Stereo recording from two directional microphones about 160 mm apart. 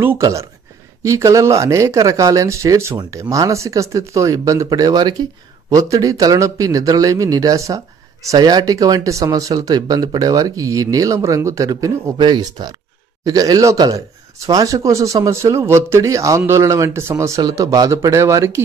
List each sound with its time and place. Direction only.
0.0 s speech: 15° right (ahead or behind)